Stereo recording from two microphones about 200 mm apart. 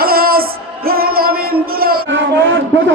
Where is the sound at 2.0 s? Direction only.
70° right (ahead or behind).